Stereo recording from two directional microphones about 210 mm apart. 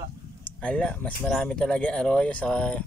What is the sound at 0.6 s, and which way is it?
Speech, 5° left (ahead or behind).